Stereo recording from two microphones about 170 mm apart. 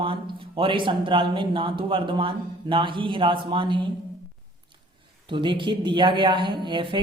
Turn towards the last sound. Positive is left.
turn(degrees=-30)  # may be behind; listen again after turning